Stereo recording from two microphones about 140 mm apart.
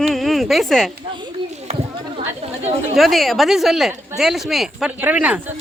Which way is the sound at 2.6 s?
50° right (ahead or behind).